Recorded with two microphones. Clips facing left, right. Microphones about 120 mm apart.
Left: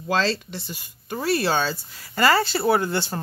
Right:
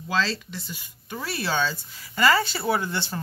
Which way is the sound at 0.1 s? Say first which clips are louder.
Left 3 dB; 35° left (ahead or behind).